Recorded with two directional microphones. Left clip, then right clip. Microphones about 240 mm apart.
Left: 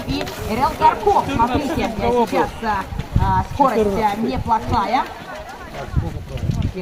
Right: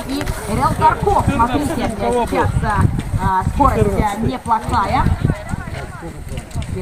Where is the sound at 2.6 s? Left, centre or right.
Left.